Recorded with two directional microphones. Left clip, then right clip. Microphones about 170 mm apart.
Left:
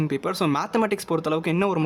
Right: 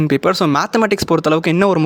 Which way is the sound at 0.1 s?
30° right (ahead or behind).